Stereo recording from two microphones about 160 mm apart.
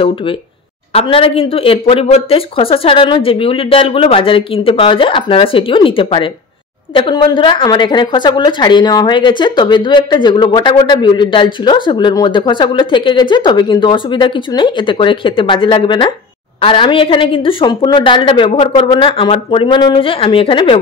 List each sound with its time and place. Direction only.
0.0 s a woman's voice: 35° left (ahead or behind)